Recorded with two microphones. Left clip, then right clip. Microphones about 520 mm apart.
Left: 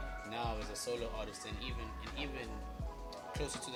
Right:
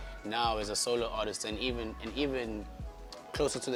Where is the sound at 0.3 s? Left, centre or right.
Right.